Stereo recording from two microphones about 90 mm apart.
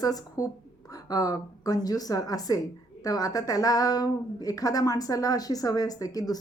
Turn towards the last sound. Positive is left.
turn(degrees=45)  # may be behind; listen again after turning